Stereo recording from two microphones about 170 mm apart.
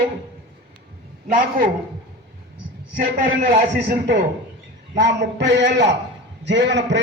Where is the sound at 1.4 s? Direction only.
50° right (ahead or behind).